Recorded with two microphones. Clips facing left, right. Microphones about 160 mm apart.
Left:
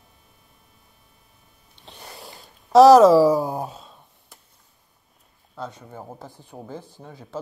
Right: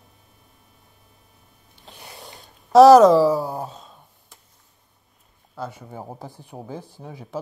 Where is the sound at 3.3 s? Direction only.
15° left (ahead or behind).